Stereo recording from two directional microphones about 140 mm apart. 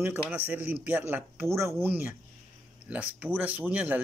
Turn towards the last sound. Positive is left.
turn(degrees=-10)  # may be behind; listen again after turning